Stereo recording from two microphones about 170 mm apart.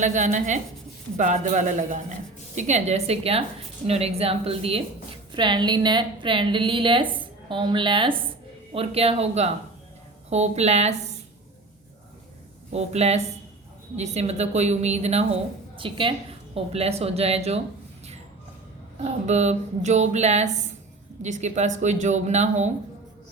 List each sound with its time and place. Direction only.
0.0 s a man's voice: 45° right (ahead or behind)
12.7 s a woman's voice: 40° right (ahead or behind)
19.2 s a woman's voice: 40° right (ahead or behind)